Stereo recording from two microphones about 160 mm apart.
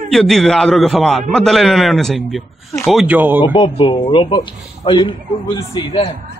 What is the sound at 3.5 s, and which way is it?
Speech, 40° left (ahead or behind).